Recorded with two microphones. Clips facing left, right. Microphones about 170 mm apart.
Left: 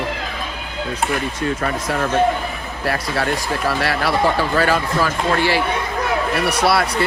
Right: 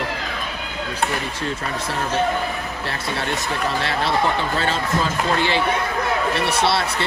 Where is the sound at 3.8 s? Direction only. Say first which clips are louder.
Left 3 dB; 25° right (ahead or behind).